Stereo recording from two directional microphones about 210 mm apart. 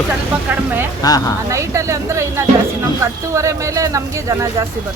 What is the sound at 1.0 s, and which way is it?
Speech, 20° left (ahead or behind).